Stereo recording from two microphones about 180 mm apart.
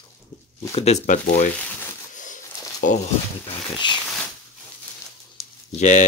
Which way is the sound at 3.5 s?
25° left (ahead or behind).